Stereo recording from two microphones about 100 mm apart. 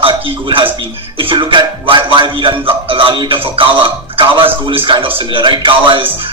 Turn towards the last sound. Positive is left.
turn(degrees=-60)  # may be behind; listen again after turning